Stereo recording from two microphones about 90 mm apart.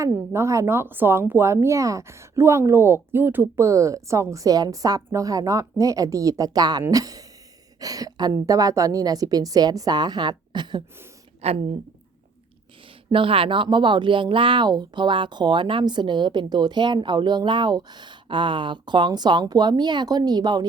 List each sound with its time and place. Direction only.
0.0 s a woman's voice: 35° right (ahead or behind); by 10.8 s 60° right (ahead or behind)
13.1 s speech: 80° right; by 20.7 s 50° right (ahead or behind)